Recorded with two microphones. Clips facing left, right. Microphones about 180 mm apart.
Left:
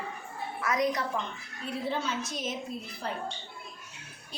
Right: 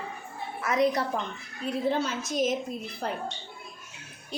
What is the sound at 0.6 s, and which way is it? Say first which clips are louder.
Speech: right 4 dB; 25° right (ahead or behind).